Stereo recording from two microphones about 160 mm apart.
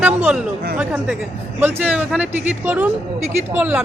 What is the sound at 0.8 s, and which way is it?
A man's voice, 5° right (ahead or behind).